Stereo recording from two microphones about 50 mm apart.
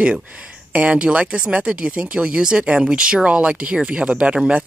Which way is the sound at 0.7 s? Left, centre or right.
Right.